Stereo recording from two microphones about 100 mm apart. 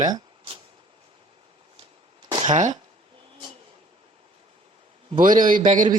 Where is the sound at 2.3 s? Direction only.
45° right (ahead or behind).